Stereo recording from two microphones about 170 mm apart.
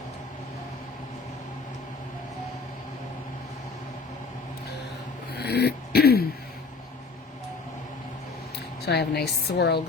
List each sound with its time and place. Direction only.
5.3 s throat clearing: 70° left (ahead or behind)
8.9 s a woman's voice: 75° left (ahead or behind)